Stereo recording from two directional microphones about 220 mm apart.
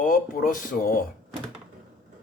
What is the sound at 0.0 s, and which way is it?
Speech, 35° left (ahead or behind).